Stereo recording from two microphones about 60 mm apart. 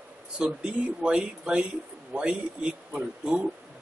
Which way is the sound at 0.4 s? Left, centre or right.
Centre.